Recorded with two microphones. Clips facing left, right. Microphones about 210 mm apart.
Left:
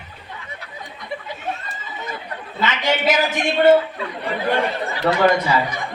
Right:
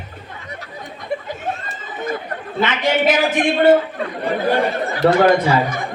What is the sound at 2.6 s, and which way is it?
Speech, 55° right (ahead or behind).